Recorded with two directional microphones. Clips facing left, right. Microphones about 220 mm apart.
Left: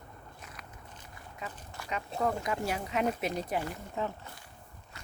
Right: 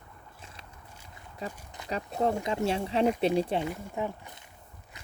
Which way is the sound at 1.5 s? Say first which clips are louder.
Even; 20° right (ahead or behind).